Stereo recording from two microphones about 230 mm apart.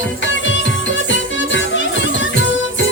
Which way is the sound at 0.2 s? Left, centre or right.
Left.